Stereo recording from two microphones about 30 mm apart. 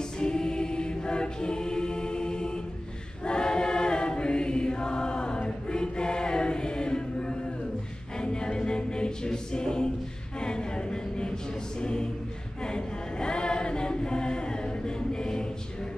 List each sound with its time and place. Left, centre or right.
0.2 s choir: left
8.2 s a capella: left
10.4 s a sound: left
11.8 s a capella: left
12.6 s chant: left